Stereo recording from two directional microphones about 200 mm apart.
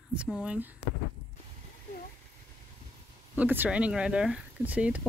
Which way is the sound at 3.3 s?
10° right (ahead or behind).